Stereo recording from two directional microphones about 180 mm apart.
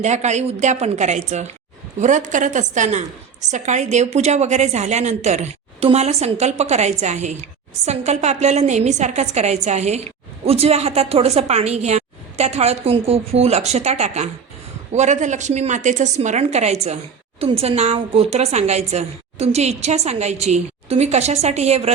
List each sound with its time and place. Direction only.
0.0 s a woman's voice: 40° right (ahead or behind)